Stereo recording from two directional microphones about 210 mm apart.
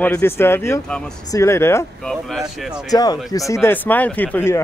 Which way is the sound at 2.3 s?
Centre (ahead or behind).